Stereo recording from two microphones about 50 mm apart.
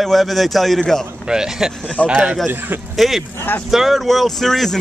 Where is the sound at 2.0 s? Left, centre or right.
Right.